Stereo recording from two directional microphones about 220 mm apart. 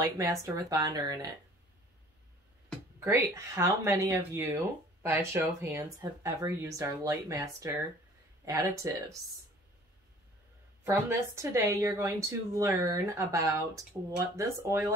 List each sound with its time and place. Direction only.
0.0 s a woman's voice: 15° right (ahead or behind)
3.0 s a woman's voice: 10° right (ahead or behind)
10.8 s a woman's voice: 10° right (ahead or behind)